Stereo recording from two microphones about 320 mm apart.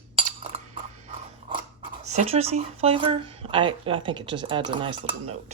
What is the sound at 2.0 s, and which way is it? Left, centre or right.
Speech, right.